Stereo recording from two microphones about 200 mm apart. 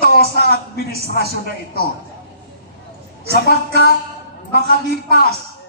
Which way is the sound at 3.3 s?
50° left (ahead or behind).